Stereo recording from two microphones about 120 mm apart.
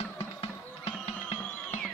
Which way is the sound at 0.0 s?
55° left (ahead or behind).